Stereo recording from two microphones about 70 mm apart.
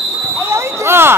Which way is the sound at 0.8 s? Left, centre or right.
Right.